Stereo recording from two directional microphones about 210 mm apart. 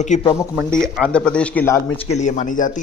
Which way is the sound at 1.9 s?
30° left (ahead or behind).